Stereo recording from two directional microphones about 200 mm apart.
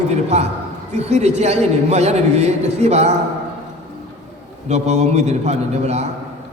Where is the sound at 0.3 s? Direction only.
35° right (ahead or behind).